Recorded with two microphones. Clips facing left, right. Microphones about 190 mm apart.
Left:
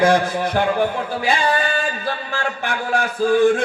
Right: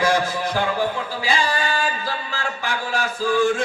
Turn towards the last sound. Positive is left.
turn(degrees=55)  # may be behind; listen again after turning